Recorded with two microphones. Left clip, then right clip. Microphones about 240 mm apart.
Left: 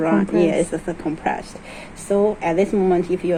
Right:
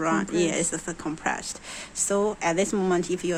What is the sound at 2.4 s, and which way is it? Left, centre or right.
Speech, right.